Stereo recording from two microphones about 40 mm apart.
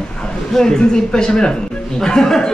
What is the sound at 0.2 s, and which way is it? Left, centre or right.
A man's voice, centre.